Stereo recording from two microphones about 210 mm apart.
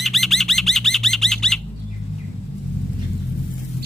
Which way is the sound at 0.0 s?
Centre (ahead or behind).